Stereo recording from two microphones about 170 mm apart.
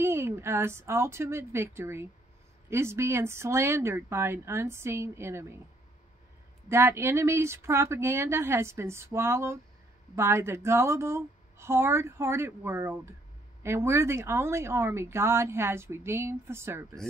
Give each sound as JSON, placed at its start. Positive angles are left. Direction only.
{"t": 0.0, "sound": "speech", "side_deg": -15}
{"t": 6.7, "sound": "speech", "side_deg": -15}